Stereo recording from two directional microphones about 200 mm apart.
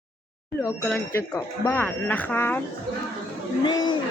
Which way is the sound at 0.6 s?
10° left (ahead or behind).